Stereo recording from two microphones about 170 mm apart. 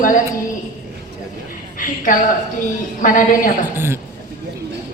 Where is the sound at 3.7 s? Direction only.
15° right (ahead or behind).